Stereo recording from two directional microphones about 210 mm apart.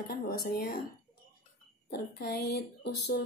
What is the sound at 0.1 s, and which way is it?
Speech, 45° left (ahead or behind).